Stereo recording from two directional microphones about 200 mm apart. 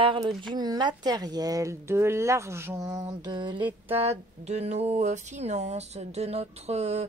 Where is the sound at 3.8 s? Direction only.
30° right (ahead or behind).